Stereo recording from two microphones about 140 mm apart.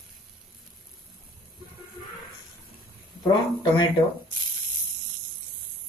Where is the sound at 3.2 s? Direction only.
30° left (ahead or behind).